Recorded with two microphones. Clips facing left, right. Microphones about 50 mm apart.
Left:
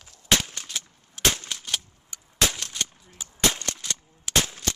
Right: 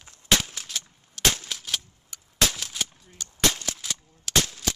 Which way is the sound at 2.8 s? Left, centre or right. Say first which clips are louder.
Even; centre.